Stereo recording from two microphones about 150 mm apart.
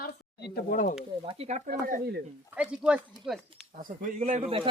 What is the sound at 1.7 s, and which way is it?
Speech, 75° right (ahead or behind).